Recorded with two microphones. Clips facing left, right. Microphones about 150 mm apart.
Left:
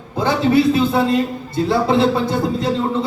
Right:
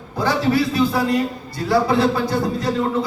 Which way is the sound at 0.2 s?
20° left (ahead or behind).